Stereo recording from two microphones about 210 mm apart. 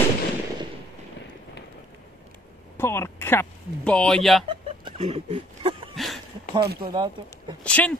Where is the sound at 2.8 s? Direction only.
10° left (ahead or behind).